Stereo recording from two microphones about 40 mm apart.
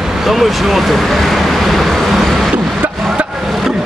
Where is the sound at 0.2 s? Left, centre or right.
Centre.